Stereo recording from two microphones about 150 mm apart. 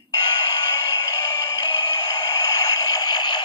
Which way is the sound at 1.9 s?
25° left (ahead or behind).